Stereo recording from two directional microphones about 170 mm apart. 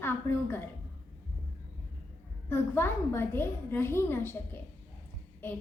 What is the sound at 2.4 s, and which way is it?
A woman's voice, 10° left (ahead or behind).